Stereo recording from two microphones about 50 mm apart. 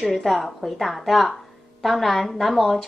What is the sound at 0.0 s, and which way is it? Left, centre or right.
Speech, centre.